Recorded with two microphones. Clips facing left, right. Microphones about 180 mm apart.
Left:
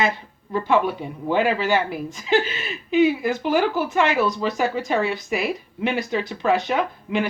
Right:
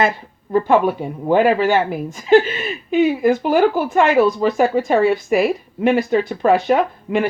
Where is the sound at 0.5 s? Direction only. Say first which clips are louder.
Right 5 dB; 50° right (ahead or behind).